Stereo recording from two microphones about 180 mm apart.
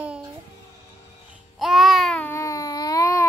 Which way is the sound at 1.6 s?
Centre (ahead or behind).